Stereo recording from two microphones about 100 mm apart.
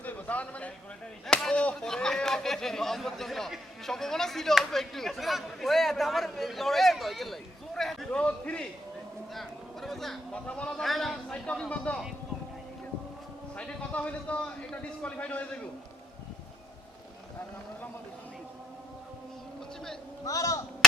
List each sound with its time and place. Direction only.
0.0 s a sound: 15° left (ahead or behind)
1.3 s speech: 5° left (ahead or behind)
8.2 s a man's voice: 15° left (ahead or behind)
9.3 s a man's voice: centre (ahead or behind)
13.6 s a man's voice: 10° left (ahead or behind)
20.2 s speech: 35° left (ahead or behind)